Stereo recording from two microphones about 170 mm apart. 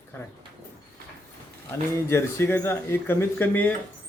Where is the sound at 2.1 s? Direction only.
15° left (ahead or behind).